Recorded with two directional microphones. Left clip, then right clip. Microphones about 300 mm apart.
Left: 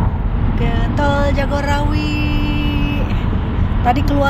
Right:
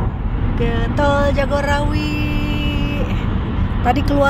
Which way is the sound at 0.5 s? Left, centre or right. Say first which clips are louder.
Right 1 dB; centre.